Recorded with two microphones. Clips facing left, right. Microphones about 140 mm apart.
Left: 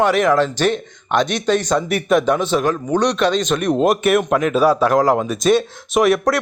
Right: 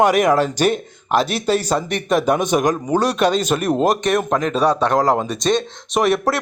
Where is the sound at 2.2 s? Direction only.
15° right (ahead or behind).